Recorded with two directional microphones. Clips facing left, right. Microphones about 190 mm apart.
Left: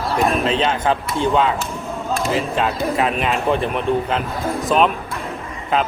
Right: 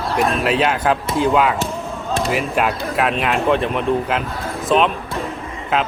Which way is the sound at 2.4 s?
Centre (ahead or behind).